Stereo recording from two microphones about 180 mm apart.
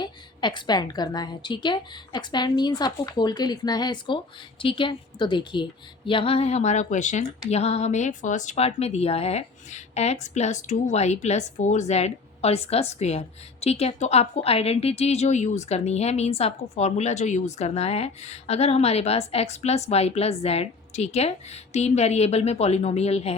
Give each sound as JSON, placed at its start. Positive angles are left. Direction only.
{"t": 0.0, "sound": "a woman's voice", "side_deg": 25}